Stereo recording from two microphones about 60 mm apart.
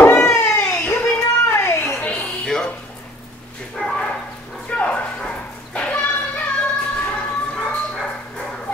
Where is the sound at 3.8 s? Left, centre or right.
Centre.